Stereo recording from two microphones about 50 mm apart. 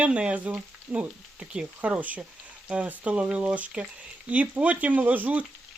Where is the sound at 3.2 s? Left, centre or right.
Right.